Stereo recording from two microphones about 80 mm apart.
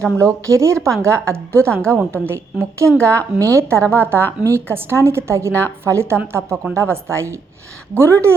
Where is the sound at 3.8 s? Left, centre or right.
Left.